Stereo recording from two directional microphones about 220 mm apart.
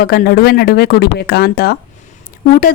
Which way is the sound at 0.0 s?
45° left (ahead or behind).